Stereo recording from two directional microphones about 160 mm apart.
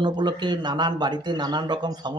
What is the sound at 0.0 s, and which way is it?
Speech, 25° right (ahead or behind).